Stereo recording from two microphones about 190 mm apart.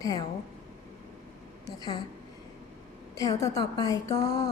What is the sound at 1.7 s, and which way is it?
Speech, 20° left (ahead or behind).